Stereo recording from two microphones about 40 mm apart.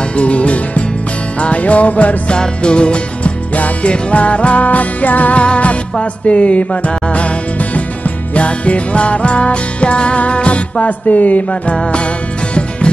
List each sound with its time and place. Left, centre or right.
0.1 s music: left
2.3 s music: left
5.4 s music: left
10.9 s music: left
11.7 s music: left